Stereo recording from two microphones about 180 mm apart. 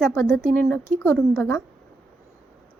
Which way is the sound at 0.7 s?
10° left (ahead or behind).